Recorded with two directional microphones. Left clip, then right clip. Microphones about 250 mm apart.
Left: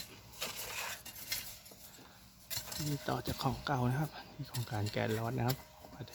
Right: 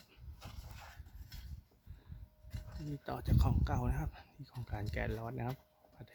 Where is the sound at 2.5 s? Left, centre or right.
Left.